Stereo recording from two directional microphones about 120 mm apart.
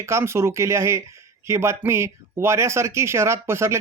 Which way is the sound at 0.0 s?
20° right (ahead or behind).